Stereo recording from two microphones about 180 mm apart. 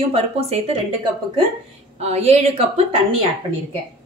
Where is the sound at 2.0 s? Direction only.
35° right (ahead or behind).